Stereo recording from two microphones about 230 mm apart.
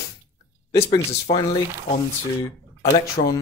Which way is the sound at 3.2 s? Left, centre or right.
Left.